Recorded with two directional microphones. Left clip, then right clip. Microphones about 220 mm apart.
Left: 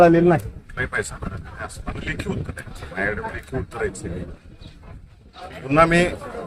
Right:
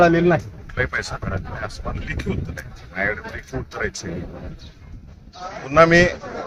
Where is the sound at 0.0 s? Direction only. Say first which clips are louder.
Left 1 dB; 15° left (ahead or behind).